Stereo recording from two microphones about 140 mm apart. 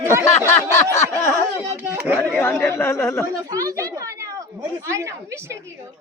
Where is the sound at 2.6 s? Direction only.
20° left (ahead or behind).